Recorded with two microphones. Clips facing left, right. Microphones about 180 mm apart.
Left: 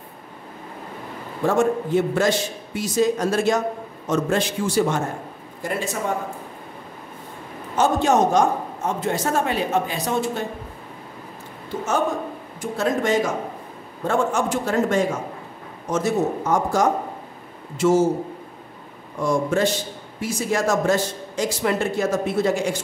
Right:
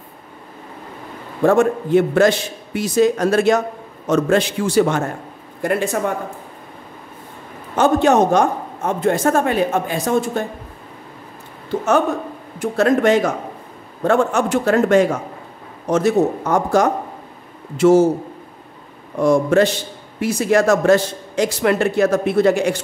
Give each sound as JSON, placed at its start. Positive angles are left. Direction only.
{"t": 1.4, "sound": "a man's voice", "side_deg": -60}
{"t": 5.6, "sound": "speech", "side_deg": -60}
{"t": 7.7, "sound": "a man's voice", "side_deg": -60}
{"t": 12.5, "sound": "a man's voice", "side_deg": -65}
{"t": 19.1, "sound": "a man's voice", "side_deg": -65}